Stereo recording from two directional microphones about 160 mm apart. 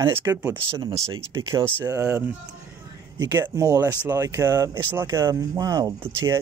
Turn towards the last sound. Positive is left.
turn(degrees=-15)  # may be behind; listen again after turning